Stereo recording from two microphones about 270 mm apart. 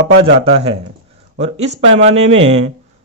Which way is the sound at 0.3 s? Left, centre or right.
Right.